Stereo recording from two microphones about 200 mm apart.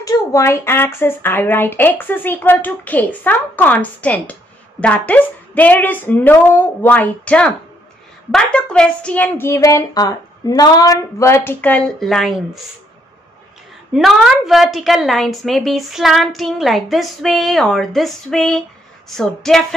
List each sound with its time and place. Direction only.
0.0 s a woman's voice: 15° left (ahead or behind)
13.9 s a woman's voice: centre (ahead or behind)